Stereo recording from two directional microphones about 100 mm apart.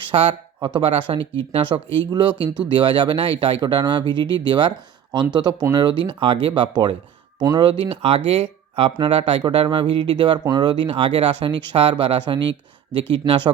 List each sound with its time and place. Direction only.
0.1 s speech: 65° right (ahead or behind)
2.0 s speech: 50° right (ahead or behind); by 9.4 s 70° right (ahead or behind)
9.4 s speech: 55° right (ahead or behind)